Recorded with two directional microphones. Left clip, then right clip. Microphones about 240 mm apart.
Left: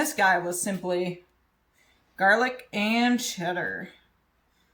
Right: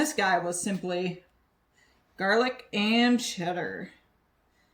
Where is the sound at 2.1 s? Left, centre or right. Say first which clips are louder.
Left 4 dB; left.